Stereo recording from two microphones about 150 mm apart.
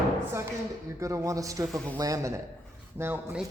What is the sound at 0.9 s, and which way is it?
A man's voice, 20° right (ahead or behind).